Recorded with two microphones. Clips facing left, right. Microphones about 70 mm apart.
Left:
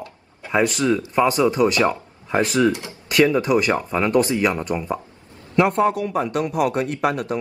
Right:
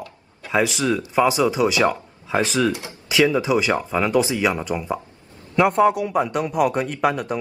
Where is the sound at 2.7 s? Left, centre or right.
Right.